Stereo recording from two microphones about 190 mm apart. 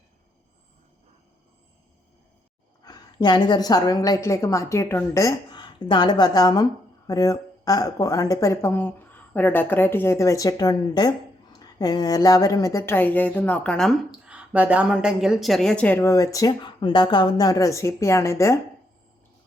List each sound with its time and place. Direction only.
2.8 s a woman's voice: 20° left (ahead or behind)